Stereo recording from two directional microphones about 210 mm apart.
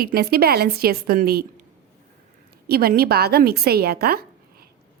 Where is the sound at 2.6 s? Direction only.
45° right (ahead or behind).